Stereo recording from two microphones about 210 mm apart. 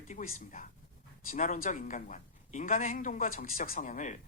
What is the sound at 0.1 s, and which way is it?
A man's voice, 40° left (ahead or behind).